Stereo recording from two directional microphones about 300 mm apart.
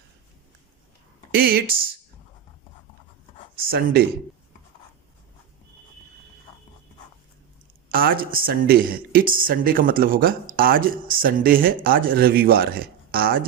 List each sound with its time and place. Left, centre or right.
1.3 s speech: right
3.7 s speech: right
7.9 s speech: right